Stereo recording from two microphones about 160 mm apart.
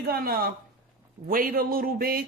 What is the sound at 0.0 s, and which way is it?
Speech, 70° right (ahead or behind).